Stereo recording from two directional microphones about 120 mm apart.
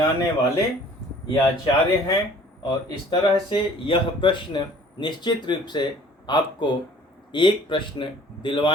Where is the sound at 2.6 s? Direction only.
40° left (ahead or behind).